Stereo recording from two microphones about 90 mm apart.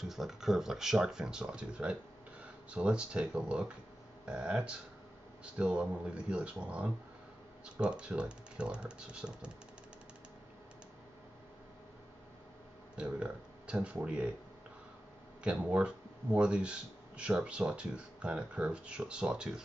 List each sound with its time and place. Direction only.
0.1 s speech: 5° right (ahead or behind)
12.9 s speech: 10° right (ahead or behind)
15.4 s speech: 10° right (ahead or behind)